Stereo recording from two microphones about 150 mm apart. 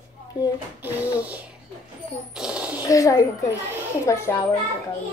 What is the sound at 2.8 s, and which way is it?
A woman's voice, 25° left (ahead or behind).